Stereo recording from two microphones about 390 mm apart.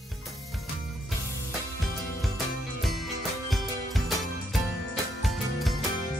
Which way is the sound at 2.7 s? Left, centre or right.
Centre.